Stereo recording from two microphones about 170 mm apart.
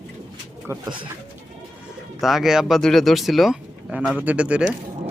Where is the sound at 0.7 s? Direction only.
15° right (ahead or behind).